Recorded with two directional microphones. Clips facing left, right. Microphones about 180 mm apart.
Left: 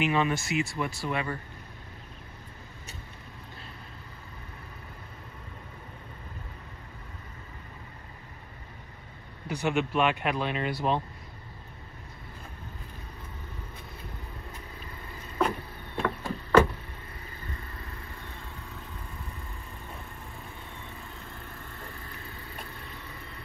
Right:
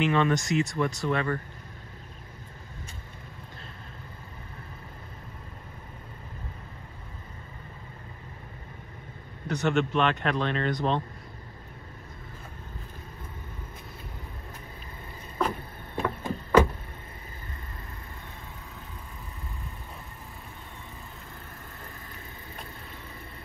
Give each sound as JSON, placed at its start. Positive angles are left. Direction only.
{"t": 0.0, "sound": "speech", "side_deg": 10}
{"t": 9.5, "sound": "speech", "side_deg": 10}
{"t": 16.0, "sound": "vehicle", "side_deg": -15}